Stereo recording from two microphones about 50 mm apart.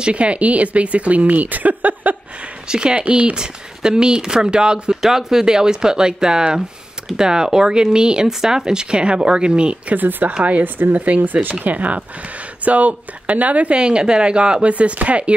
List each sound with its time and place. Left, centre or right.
0.0 s speech: right
2.7 s speech: centre
9.9 s speech: right
10.3 s speech: right
10.6 s speech: right
13.7 s speech: centre